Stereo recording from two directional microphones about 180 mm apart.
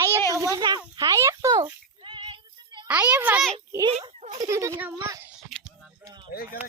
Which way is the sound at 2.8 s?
10° right (ahead or behind).